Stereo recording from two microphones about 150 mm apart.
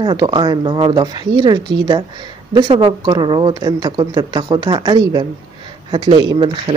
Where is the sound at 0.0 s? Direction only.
30° right (ahead or behind).